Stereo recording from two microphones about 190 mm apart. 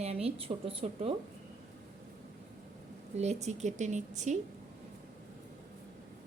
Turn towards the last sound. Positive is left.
turn(degrees=-40)  # may be behind; listen again after turning